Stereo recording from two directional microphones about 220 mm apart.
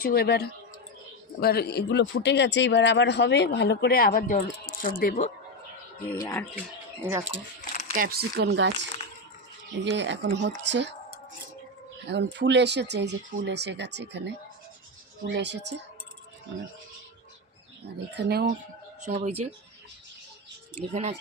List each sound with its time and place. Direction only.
0.0 s speech: 45° left (ahead or behind)
6.1 s speech: 15° left (ahead or behind)
7.0 s speech: 10° right (ahead or behind)
7.9 s speech: 45° right (ahead or behind)
12.0 s speech: 55° right (ahead or behind)
18.2 s speech: 45° right (ahead or behind)
19.0 s speech: 30° right (ahead or behind)
20.7 s speech: 30° right (ahead or behind)